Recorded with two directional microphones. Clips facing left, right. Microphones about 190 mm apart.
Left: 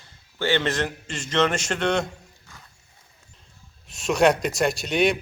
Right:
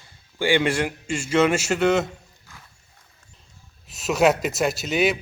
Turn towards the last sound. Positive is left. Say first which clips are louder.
# even
turn(degrees=0)  # may be behind; listen again after turning